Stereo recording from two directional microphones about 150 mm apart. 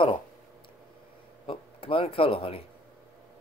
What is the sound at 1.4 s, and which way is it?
Speech, 35° left (ahead or behind).